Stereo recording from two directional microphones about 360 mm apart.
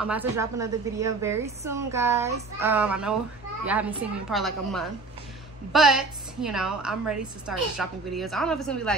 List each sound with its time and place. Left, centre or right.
0.0 s a woman's voice: centre
4.3 s a woman's voice: centre